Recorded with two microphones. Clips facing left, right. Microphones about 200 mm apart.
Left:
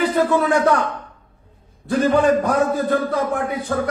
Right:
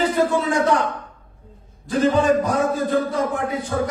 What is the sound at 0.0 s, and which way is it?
Speech, 60° left (ahead or behind).